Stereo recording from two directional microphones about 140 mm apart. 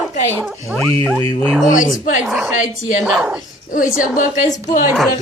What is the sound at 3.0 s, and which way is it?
Speech, 5° right (ahead or behind).